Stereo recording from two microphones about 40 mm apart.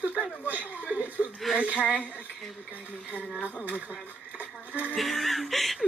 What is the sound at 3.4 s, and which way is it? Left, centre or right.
Speech, left.